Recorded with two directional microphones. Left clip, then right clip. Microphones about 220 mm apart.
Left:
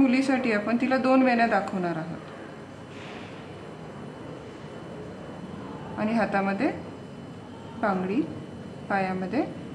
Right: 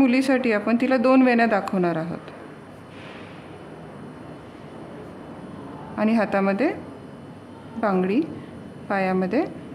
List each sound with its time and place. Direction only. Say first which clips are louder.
0.0 s speech: right 4 dB; 45° right (ahead or behind)
5.9 s speech: right 4 dB; 45° right (ahead or behind)
7.8 s speech: right 4 dB; 45° right (ahead or behind)